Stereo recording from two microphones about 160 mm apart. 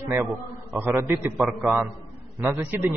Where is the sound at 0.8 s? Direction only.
15° right (ahead or behind).